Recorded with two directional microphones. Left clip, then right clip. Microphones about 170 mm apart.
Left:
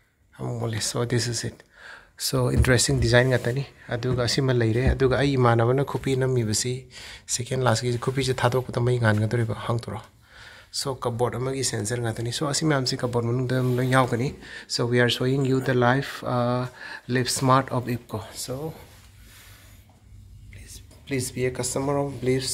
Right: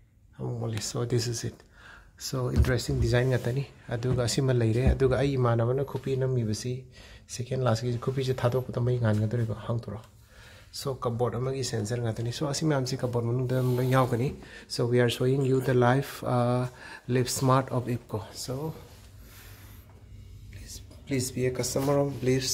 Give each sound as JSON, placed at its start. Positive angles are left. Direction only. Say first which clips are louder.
{"t": 0.4, "sound": "speech", "louder": "left 5 dB", "side_deg": 10}
{"t": 2.1, "sound": "speech", "louder": "left 7 dB", "side_deg": 35}
{"t": 3.0, "sound": "speech", "louder": "left 7 dB", "side_deg": 5}
{"t": 10.7, "sound": "speech", "louder": "left 4 dB", "side_deg": 0}
{"t": 20.7, "sound": "speech", "louder": "left 2 dB", "side_deg": 10}